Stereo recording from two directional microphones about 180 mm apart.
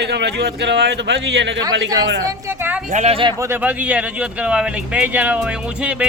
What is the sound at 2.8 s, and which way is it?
Speech, 40° right (ahead or behind).